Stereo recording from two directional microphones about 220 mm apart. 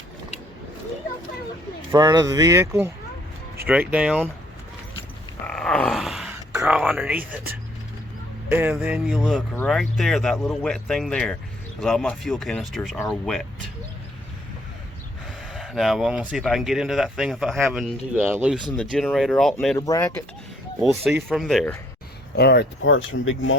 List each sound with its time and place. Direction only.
1.9 s speech: 20° right (ahead or behind)
5.5 s a sound: 5° left (ahead or behind)
8.4 s speech: 10° right (ahead or behind)
15.5 s speech: centre (ahead or behind)
18.8 s speech: 5° left (ahead or behind)
20.8 s speech: centre (ahead or behind)
22.4 s speech: 50° left (ahead or behind)